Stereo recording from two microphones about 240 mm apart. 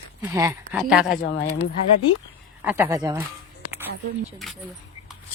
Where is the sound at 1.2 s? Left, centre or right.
Left.